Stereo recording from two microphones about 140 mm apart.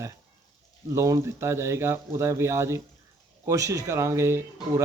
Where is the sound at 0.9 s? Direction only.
20° right (ahead or behind).